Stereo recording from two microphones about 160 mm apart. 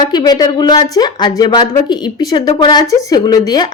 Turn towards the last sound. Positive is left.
turn(degrees=25)  # may be behind; listen again after turning